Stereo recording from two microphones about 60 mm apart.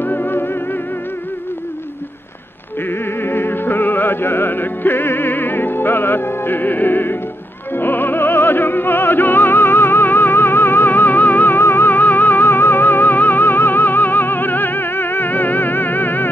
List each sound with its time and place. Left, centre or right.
0.0 s music: left
2.9 s music: left
7.7 s opera: left